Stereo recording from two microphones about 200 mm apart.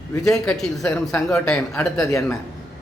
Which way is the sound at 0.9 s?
15° left (ahead or behind).